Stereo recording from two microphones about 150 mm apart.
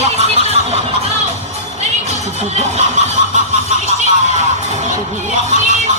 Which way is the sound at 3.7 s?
50° left (ahead or behind).